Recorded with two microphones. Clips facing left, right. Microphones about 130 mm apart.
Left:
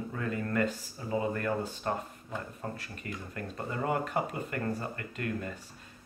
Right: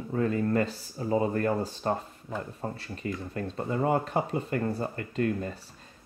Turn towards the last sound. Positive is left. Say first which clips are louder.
# right 7 dB
turn(degrees=-30)  # may be behind; listen again after turning